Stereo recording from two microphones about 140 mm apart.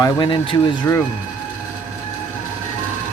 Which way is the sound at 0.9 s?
20° left (ahead or behind).